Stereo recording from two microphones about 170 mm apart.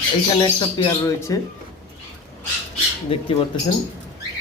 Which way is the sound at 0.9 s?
20° left (ahead or behind).